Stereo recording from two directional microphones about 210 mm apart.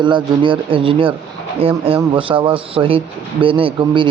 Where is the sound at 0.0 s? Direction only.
25° right (ahead or behind).